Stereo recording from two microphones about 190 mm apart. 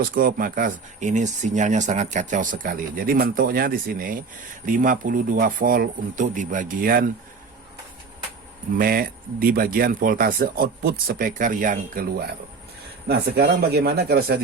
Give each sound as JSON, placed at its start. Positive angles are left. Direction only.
{"t": 0.0, "sound": "speech", "side_deg": -50}
{"t": 8.8, "sound": "speech", "side_deg": -50}